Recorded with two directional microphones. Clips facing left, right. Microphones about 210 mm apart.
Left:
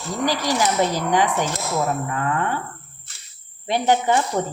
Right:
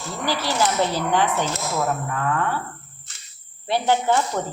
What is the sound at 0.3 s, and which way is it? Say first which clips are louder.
Speech: left 1 dB; 15° left (ahead or behind).